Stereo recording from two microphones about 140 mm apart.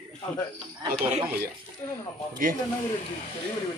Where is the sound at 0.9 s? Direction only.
45° right (ahead or behind).